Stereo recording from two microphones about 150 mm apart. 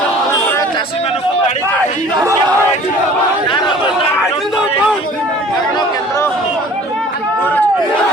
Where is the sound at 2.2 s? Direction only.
20° right (ahead or behind).